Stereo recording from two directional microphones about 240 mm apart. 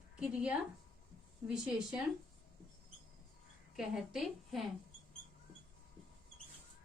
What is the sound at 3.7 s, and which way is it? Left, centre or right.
Speech, centre.